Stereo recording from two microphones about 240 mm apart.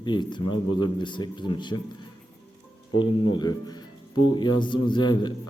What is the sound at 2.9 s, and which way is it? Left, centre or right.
A man's voice, centre.